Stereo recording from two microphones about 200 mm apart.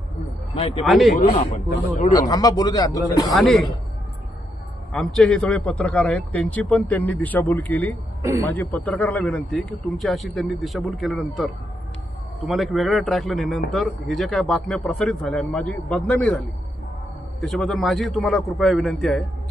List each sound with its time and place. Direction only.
0.8 s speech: centre (ahead or behind)
1.3 s speech: 35° left (ahead or behind)
2.1 s speech: 20° left (ahead or behind)
3.3 s speech: centre (ahead or behind)
4.9 s a man's voice: centre (ahead or behind)
8.2 s a man's voice: 15° right (ahead or behind)
8.5 s speech: 10° left (ahead or behind)